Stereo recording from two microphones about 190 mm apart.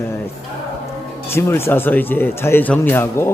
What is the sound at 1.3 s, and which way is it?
Speech, 10° left (ahead or behind).